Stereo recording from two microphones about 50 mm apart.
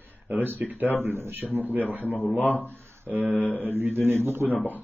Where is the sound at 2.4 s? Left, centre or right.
Left.